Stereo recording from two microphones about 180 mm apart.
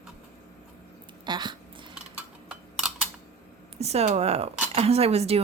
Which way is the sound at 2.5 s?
5° right (ahead or behind).